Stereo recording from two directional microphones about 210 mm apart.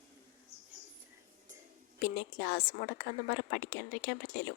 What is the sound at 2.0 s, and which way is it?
A woman's voice, 50° left (ahead or behind).